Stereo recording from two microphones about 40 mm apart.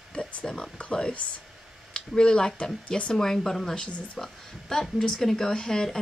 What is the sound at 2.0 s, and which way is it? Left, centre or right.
Speech, centre.